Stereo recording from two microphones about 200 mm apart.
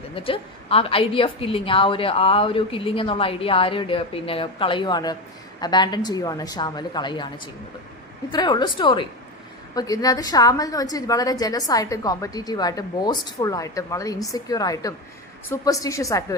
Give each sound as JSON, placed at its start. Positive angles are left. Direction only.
{"t": 0.1, "sound": "a woman's voice", "side_deg": 25}